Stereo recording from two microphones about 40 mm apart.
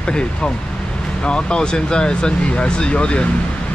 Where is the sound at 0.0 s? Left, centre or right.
Left.